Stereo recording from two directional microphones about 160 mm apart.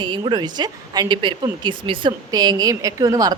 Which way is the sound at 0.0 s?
30° right (ahead or behind).